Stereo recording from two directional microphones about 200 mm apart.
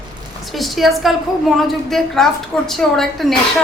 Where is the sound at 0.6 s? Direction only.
Centre (ahead or behind).